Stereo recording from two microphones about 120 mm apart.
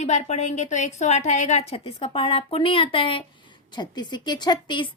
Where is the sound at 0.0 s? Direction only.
70° left (ahead or behind).